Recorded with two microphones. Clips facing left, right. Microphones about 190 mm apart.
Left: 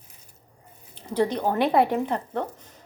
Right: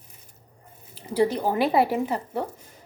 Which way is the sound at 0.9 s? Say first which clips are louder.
Right 1 dB; 5° right (ahead or behind).